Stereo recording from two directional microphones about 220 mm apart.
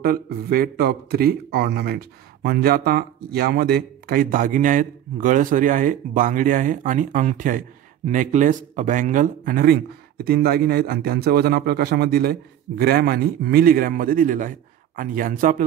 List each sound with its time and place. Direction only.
0.0 s speech: 40° right (ahead or behind)